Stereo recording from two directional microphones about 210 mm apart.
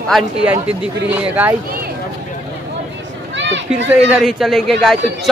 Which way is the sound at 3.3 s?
60° right (ahead or behind).